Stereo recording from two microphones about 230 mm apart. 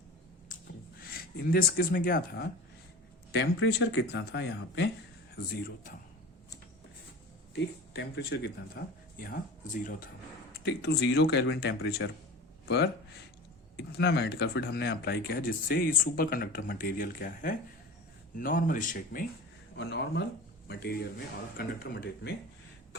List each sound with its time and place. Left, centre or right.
1.1 s speech: left
7.5 s speech: left
19.7 s speech: left